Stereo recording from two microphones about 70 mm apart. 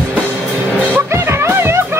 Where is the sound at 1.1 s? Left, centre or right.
Right.